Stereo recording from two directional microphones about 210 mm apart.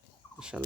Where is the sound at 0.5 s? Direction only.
Centre (ahead or behind).